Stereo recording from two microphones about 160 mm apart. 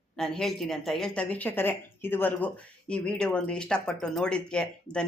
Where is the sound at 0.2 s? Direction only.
Centre (ahead or behind).